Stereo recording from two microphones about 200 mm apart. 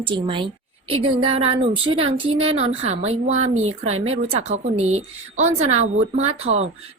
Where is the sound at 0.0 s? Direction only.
25° right (ahead or behind).